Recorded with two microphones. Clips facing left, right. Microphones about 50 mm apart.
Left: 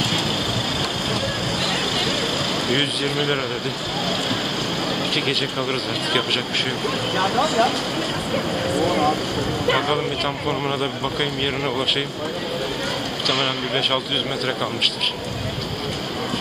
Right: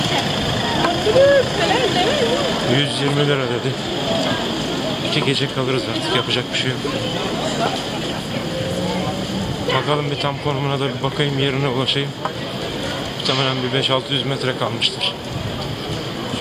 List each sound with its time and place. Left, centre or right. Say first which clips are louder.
0.7 s vehicle: right 10 dB; right
2.7 s speech: right 3 dB; centre
5.1 s a man's voice: right 3 dB; centre
9.8 s a man's voice: right 2 dB; centre
13.3 s a man's voice: right 3 dB; centre